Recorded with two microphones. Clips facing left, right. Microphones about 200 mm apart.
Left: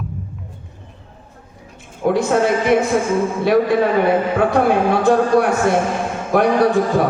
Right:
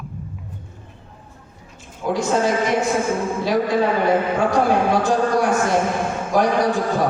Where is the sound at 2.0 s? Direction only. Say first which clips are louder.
Left 4 dB; 60° left (ahead or behind).